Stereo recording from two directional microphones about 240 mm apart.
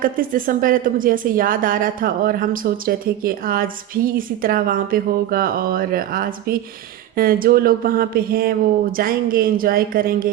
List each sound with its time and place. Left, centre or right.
0.0 s a woman's voice: right